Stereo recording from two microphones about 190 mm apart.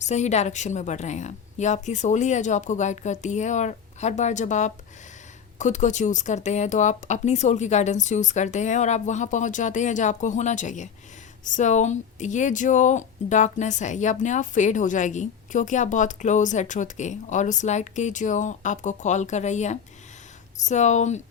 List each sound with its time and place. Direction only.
0.0 s speech: 40° left (ahead or behind)